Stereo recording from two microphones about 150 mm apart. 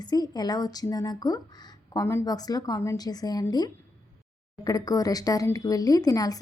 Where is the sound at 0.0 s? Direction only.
25° left (ahead or behind).